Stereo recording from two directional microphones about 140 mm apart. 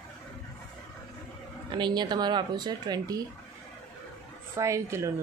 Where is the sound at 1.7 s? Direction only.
30° right (ahead or behind).